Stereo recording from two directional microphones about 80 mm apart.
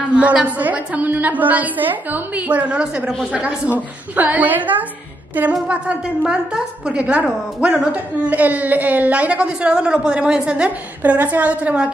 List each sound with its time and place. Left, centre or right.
0.1 s a woman's voice: centre